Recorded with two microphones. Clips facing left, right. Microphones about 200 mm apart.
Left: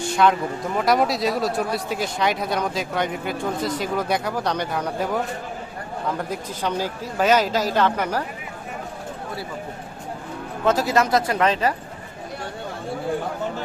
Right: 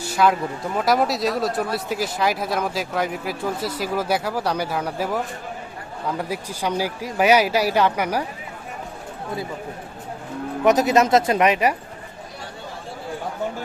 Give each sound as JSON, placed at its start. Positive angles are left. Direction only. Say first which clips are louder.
{"t": 0.0, "sound": "a sound", "louder": "even", "side_deg": -5}
{"t": 0.8, "sound": "speech", "louder": "even", "side_deg": 0}
{"t": 10.6, "sound": "speech", "louder": "right 3 dB", "side_deg": -15}